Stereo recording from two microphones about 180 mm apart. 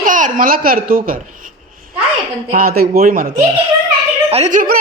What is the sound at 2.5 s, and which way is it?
Speech, 55° right (ahead or behind).